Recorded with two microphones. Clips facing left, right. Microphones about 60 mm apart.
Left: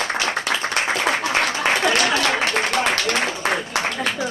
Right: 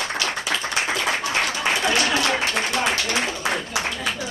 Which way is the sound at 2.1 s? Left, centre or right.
Left.